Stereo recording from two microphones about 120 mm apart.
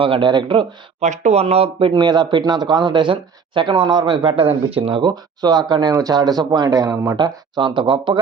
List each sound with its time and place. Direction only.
0.0 s speech: 45° right (ahead or behind)
1.0 s speech: 75° right (ahead or behind); by 7.2 s 25° right (ahead or behind)
7.2 s speech: 40° right (ahead or behind)